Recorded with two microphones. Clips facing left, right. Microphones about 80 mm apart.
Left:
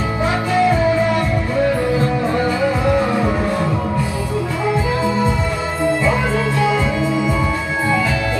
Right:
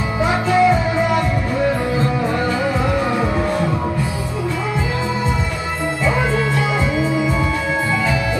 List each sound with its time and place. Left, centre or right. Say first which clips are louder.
0.2 s music: right 2 dB; right
6.0 s music: left 1 dB; right